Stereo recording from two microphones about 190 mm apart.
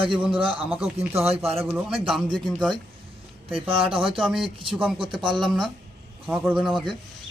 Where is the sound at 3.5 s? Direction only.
30° right (ahead or behind).